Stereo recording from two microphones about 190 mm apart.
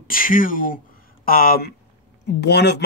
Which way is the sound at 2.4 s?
60° left (ahead or behind).